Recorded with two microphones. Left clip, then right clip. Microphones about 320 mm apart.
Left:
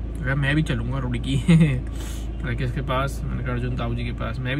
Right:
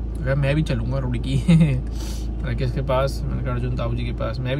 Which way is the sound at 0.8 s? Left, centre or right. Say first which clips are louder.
Right 2 dB; centre.